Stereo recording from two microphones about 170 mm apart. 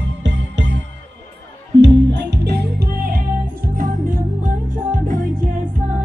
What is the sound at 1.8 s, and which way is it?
Music, 80° right.